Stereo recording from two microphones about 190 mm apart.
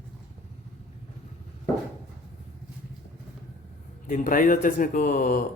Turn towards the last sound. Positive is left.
turn(degrees=50)  # may be behind; listen again after turning